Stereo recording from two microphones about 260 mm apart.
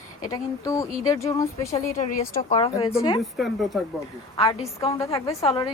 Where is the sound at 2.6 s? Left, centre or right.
Left.